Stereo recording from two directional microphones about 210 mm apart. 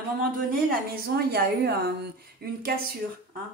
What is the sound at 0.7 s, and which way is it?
A woman's voice, 50° right (ahead or behind).